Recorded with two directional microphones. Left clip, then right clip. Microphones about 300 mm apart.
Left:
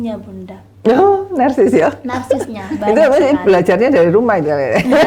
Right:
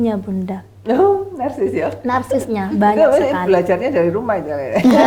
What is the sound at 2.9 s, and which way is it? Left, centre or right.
Speech, left.